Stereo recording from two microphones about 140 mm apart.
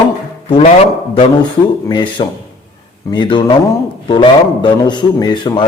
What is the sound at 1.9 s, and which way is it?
A man's voice, 35° left (ahead or behind).